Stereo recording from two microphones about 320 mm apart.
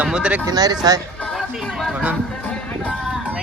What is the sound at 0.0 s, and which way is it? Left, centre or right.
Speech, centre.